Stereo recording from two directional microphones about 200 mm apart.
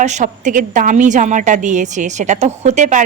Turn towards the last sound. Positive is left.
turn(degrees=-35)  # may be behind; listen again after turning